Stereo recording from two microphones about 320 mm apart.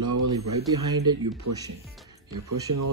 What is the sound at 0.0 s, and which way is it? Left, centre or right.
Speech, right.